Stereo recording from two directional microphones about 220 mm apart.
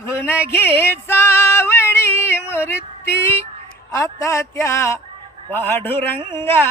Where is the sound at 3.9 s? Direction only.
15° left (ahead or behind).